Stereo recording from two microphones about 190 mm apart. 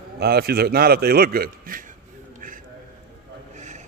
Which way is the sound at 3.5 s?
40° right (ahead or behind).